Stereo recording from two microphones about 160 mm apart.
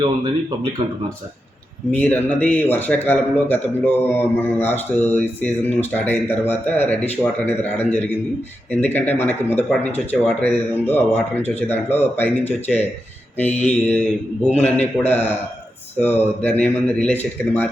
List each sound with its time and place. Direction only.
0.8 s speech: 30° right (ahead or behind)
1.9 s a man's voice: 10° left (ahead or behind)